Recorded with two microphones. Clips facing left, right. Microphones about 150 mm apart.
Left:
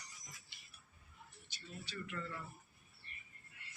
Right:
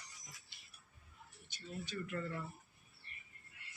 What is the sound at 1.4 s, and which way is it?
Speech, 50° right (ahead or behind).